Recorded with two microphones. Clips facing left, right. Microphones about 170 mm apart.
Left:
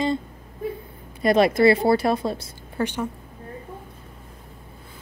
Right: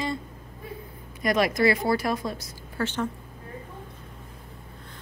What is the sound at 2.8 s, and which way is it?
Speech, 10° left (ahead or behind).